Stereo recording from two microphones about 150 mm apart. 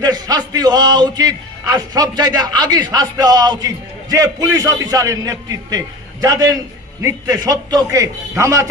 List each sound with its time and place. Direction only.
0.0 s a man's voice: 25° right (ahead or behind)